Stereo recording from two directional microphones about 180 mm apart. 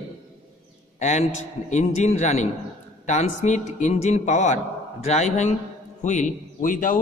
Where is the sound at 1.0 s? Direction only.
40° left (ahead or behind).